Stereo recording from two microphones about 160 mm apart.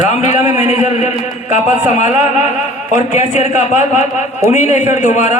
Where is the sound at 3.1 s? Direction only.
45° left (ahead or behind).